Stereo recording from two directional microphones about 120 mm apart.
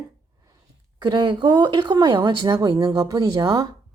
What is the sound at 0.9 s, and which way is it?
Speech, 40° right (ahead or behind).